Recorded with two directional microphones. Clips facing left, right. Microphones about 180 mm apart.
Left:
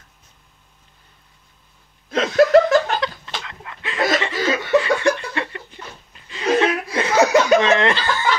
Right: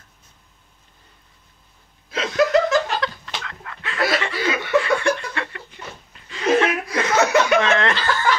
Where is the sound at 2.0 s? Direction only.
50° left (ahead or behind).